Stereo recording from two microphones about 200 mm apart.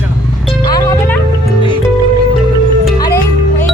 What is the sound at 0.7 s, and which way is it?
Music, 10° left (ahead or behind).